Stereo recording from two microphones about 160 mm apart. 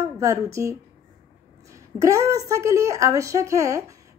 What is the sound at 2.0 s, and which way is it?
A woman's voice, 20° right (ahead or behind).